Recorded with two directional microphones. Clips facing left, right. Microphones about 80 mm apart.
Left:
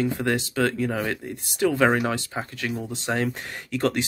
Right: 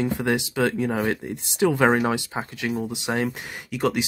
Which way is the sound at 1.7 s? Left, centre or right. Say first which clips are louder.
Right 1 dB; centre.